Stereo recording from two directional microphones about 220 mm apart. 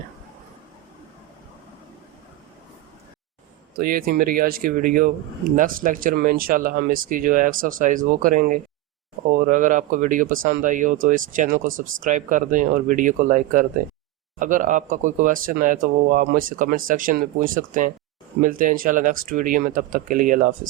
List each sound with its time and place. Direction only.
3.8 s speech: 40° right (ahead or behind)